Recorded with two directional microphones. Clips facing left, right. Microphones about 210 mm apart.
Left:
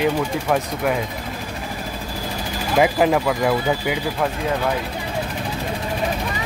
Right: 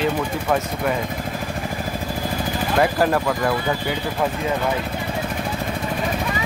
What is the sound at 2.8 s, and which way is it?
Speech, 10° left (ahead or behind).